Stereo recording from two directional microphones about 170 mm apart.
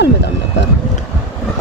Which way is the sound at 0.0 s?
90° left.